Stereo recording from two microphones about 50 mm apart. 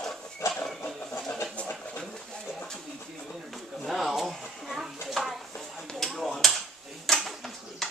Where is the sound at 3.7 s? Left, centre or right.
Centre.